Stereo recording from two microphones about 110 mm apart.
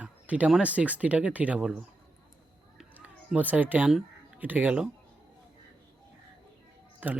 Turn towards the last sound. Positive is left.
turn(degrees=-15)  # may be behind; listen again after turning